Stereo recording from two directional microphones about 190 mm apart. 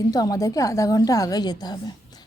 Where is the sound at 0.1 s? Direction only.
20° left (ahead or behind).